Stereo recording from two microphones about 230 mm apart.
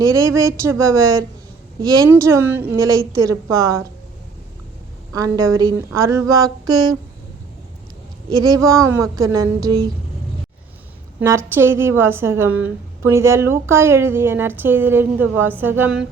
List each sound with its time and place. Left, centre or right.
0.0 s speech: centre
5.5 s speech: centre
8.4 s speech: centre
11.2 s speech: centre